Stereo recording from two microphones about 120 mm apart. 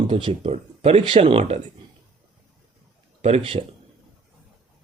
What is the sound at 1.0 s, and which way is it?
Speech, 45° right (ahead or behind).